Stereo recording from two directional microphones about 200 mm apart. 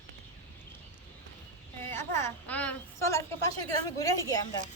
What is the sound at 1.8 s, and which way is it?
A woman's voice, 10° left (ahead or behind).